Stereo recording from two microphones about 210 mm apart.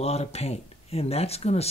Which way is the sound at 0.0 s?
30° left (ahead or behind).